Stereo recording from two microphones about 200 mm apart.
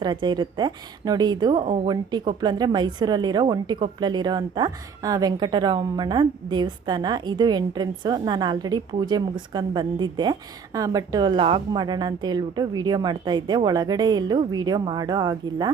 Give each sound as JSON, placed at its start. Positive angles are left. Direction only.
{"t": 0.0, "sound": "a woman's voice", "side_deg": -20}